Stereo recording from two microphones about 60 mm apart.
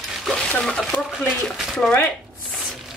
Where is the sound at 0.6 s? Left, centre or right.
Centre.